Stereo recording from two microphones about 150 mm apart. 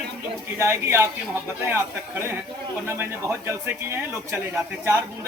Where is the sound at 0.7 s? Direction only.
15° right (ahead or behind).